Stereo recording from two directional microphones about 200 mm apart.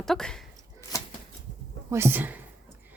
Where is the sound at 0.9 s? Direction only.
15° left (ahead or behind).